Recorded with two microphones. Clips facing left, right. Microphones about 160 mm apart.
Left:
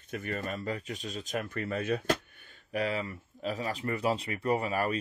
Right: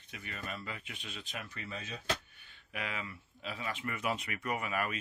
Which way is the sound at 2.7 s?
35° left (ahead or behind).